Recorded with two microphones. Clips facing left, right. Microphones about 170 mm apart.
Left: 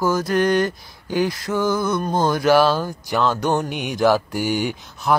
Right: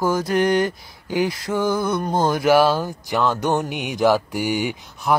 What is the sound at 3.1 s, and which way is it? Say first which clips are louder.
Speech: even; centre (ahead or behind).